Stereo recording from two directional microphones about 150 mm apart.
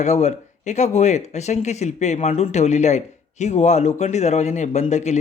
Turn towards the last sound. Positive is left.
turn(degrees=50)  # may be behind; listen again after turning